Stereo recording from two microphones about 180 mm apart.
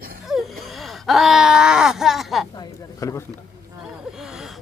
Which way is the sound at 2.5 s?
15° left (ahead or behind).